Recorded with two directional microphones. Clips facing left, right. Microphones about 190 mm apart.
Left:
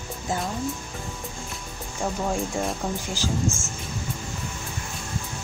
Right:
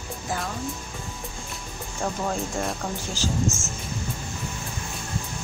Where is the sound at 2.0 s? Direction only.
5° left (ahead or behind).